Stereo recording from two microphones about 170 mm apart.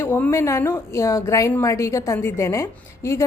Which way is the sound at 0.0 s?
15° left (ahead or behind).